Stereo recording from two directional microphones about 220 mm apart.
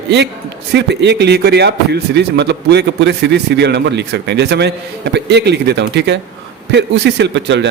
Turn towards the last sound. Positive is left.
turn(degrees=-55)  # may be behind; listen again after turning